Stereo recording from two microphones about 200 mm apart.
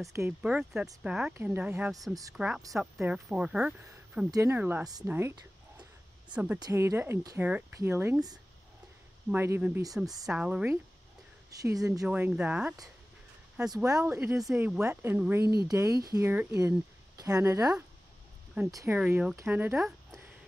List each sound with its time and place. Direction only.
0.1 s speech: 10° right (ahead or behind)
12.1 s speech: 5° right (ahead or behind)
13.8 s speech: 15° right (ahead or behind)